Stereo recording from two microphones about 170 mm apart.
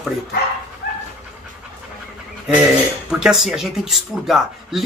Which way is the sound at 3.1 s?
5° right (ahead or behind).